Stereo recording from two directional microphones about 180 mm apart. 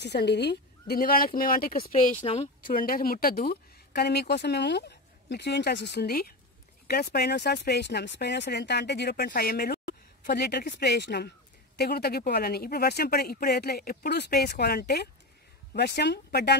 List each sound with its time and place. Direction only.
0.0 s speech: 65° left (ahead or behind)
1.9 s speech: 35° left (ahead or behind)
2.6 s speech: 50° left (ahead or behind)